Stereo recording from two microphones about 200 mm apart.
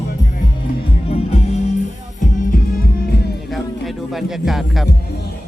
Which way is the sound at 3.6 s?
Centre (ahead or behind).